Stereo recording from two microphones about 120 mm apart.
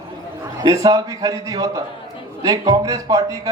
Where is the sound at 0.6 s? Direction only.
30° right (ahead or behind).